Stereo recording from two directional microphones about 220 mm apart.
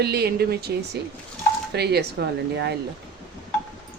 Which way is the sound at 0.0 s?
45° right (ahead or behind).